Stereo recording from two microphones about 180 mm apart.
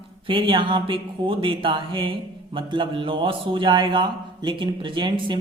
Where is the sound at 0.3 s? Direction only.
30° right (ahead or behind).